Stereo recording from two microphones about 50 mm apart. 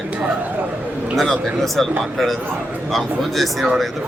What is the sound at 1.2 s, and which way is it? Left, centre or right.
Speech, centre.